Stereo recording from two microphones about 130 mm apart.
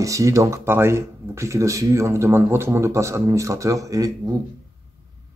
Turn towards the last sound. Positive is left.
turn(degrees=-25)  # may be behind; listen again after turning